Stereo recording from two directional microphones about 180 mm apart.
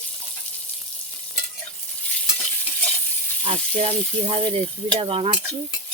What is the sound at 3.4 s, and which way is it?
Speech, 35° right (ahead or behind).